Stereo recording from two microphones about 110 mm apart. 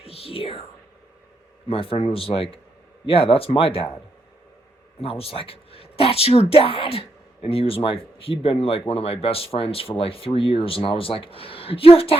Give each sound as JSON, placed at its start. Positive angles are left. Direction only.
{"t": 0.0, "sound": "speech", "side_deg": 60}
{"t": 4.9, "sound": "speech", "side_deg": 60}